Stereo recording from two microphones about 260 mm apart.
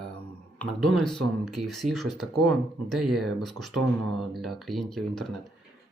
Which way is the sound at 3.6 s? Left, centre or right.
Right.